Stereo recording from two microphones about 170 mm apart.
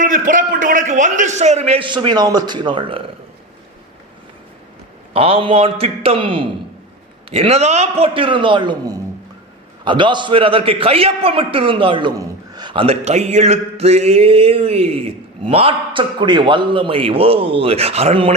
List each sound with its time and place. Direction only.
0.0 s a man's voice: 50° right (ahead or behind); by 3.0 s 30° right (ahead or behind)
5.1 s a man's voice: 35° right (ahead or behind)